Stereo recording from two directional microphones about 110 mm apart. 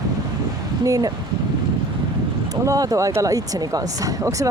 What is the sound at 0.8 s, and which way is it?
Speech, 35° right (ahead or behind).